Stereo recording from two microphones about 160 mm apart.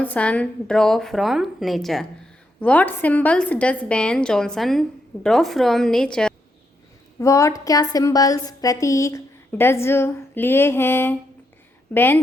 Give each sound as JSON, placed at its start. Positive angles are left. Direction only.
{"t": 0.0, "sound": "a woman's voice", "side_deg": 10}
{"t": 7.2, "sound": "a woman's voice", "side_deg": 20}